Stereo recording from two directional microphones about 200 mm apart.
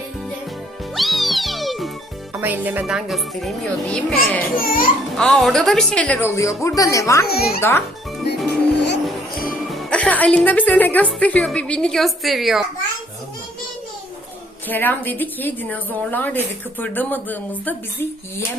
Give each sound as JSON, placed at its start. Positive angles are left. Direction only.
{"t": 0.9, "sound": "music", "side_deg": 0}
{"t": 2.3, "sound": "a woman's voice", "side_deg": -10}
{"t": 4.5, "sound": "a child's voice", "side_deg": 45}
{"t": 5.1, "sound": "speech", "side_deg": 5}
{"t": 7.3, "sound": "a child's voice", "side_deg": 50}
{"t": 7.6, "sound": "speech", "side_deg": 10}
{"t": 8.7, "sound": "music", "side_deg": 60}
{"t": 9.3, "sound": "music", "side_deg": 45}
{"t": 9.7, "sound": "a woman's voice", "side_deg": 5}
{"t": 14.7, "sound": "speech", "side_deg": 10}